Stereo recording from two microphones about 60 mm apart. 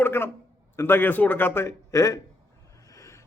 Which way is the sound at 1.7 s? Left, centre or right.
Left.